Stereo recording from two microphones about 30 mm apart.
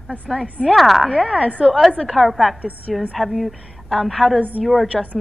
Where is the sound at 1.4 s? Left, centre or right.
Left.